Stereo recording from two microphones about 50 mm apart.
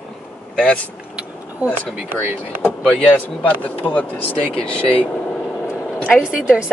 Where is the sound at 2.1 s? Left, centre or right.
Right.